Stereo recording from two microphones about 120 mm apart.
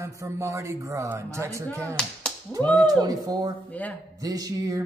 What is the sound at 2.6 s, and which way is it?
Speech, 10° left (ahead or behind).